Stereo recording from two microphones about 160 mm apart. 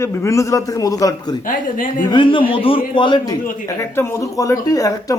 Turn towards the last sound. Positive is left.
turn(degrees=20)  # may be behind; listen again after turning